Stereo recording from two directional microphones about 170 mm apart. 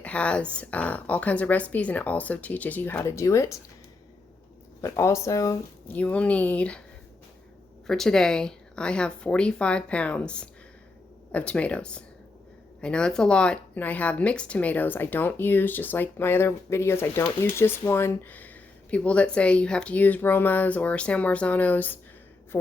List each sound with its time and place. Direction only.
0.0 s speech: 5° left (ahead or behind)
4.8 s speech: 15° left (ahead or behind)
6.0 s speech: 10° left (ahead or behind)
7.9 s a woman's voice: 5° left (ahead or behind)